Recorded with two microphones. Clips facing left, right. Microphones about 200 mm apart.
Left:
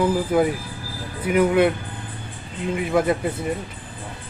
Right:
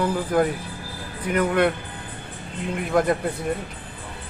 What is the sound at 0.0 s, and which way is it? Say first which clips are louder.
Speech: left 2 dB; 5° left (ahead or behind).